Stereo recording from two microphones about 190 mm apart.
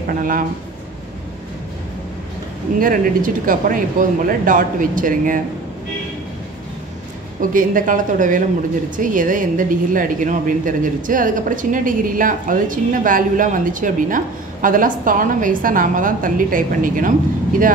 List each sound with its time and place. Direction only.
2.8 s a woman's voice: 45° right (ahead or behind)
7.5 s a woman's voice: 45° right (ahead or behind)